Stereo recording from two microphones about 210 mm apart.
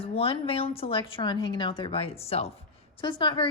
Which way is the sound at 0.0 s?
25° left (ahead or behind).